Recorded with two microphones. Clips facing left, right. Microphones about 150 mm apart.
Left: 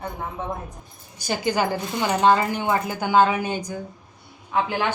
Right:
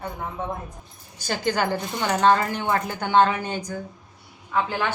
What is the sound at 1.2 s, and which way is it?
A woman's voice, 10° left (ahead or behind).